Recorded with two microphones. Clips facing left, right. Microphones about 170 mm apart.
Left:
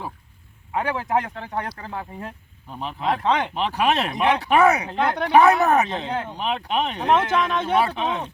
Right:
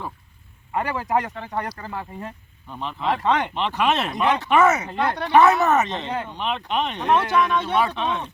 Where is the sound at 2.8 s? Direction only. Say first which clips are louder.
Even; 5° left (ahead or behind).